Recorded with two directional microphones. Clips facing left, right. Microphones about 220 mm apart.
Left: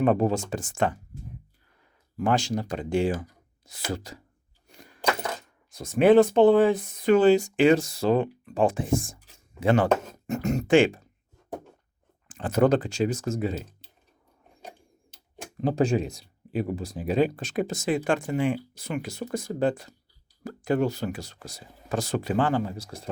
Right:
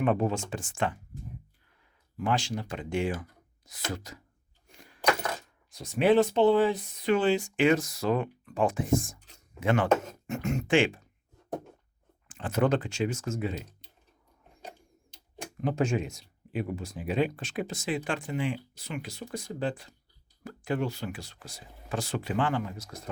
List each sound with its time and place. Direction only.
0.0 s speech: 40° left (ahead or behind)
2.1 s speech: 45° left (ahead or behind)
5.7 s speech: 50° left (ahead or behind)
12.3 s speech: 40° left (ahead or behind)
13.8 s typing: 5° left (ahead or behind)
15.6 s speech: 35° left (ahead or behind)